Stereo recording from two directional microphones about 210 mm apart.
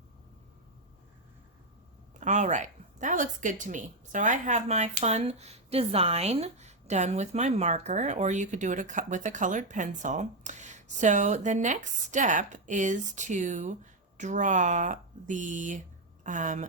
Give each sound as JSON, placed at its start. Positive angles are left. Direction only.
{"t": 2.2, "sound": "a woman's voice", "side_deg": -35}